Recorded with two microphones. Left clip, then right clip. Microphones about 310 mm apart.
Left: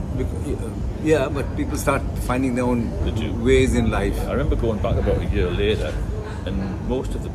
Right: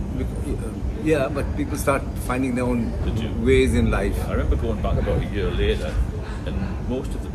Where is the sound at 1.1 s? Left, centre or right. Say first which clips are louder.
Left 2 dB; centre.